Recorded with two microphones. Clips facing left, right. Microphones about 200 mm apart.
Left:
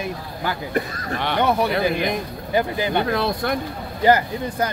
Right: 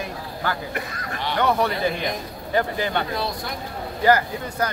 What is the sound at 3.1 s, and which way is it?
Speech, 55° left (ahead or behind).